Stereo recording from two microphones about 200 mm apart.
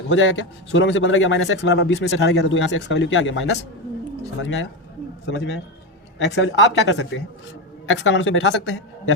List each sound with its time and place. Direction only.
0.1 s a man's voice: 70° left (ahead or behind)
6.1 s speech: 65° left (ahead or behind)
7.9 s a man's voice: 75° left (ahead or behind)